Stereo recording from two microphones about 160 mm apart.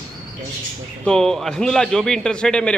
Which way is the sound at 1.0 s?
5° left (ahead or behind).